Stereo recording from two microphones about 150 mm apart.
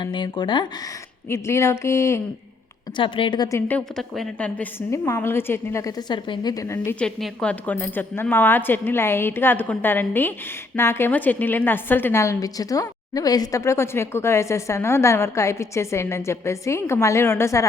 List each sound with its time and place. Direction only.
0.0 s a woman's voice: 30° left (ahead or behind)
1.3 s a woman's voice: 15° left (ahead or behind)
2.9 s a woman's voice: 35° left (ahead or behind)
3.7 s a woman's voice: 5° left (ahead or behind)
7.0 s a woman's voice: 5° left (ahead or behind)